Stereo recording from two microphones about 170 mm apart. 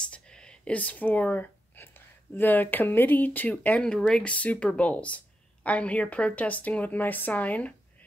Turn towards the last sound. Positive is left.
turn(degrees=10)  # may be behind; listen again after turning